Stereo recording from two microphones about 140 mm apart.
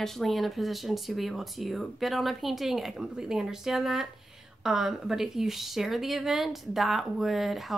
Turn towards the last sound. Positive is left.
turn(degrees=0)  # may be behind; listen again after turning